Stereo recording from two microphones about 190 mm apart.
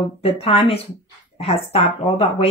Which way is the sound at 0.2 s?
30° left (ahead or behind).